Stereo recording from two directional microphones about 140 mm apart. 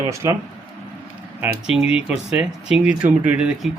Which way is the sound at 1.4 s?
5° right (ahead or behind).